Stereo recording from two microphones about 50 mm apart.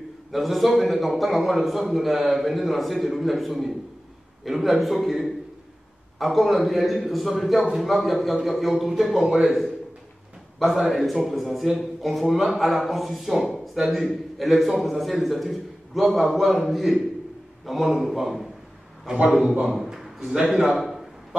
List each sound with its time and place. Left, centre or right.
0.3 s speech: centre
10.9 s speech: centre
19.1 s a man's voice: centre
19.4 s a man's voice: right
19.7 s a sound: centre